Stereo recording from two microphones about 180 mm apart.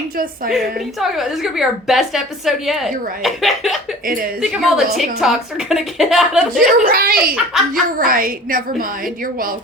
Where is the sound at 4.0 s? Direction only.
50° right (ahead or behind).